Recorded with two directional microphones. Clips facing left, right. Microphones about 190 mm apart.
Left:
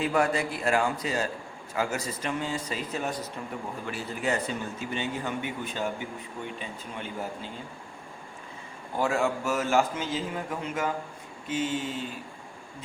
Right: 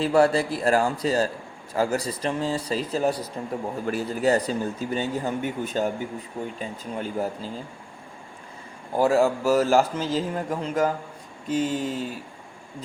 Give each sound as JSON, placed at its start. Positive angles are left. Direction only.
{"t": 0.0, "sound": "speech", "side_deg": -35}
{"t": 9.0, "sound": "speech", "side_deg": -35}